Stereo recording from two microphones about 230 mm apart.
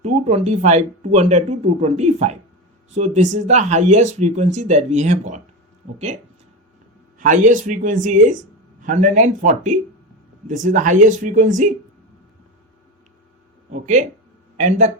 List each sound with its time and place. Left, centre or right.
0.0 s speech: right
7.2 s speech: right
13.7 s speech: right